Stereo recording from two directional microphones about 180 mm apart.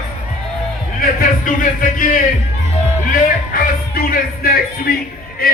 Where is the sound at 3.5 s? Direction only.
55° left (ahead or behind).